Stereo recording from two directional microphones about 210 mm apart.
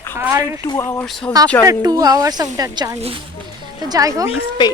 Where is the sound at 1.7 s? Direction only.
15° right (ahead or behind).